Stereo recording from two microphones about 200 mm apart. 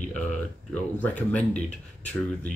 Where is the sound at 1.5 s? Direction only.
35° left (ahead or behind).